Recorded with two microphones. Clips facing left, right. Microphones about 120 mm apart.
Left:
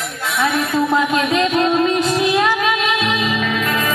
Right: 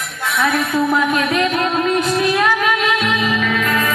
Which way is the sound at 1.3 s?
30° left (ahead or behind).